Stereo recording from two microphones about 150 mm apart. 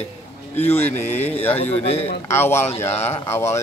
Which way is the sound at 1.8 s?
45° left (ahead or behind).